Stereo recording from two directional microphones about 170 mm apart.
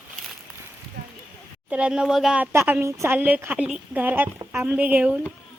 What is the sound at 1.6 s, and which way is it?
Speech, 10° right (ahead or behind).